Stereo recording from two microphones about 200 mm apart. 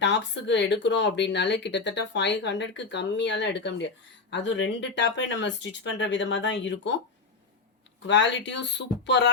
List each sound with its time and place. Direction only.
0.0 s speech: 65° left (ahead or behind)
8.0 s speech: 65° left (ahead or behind)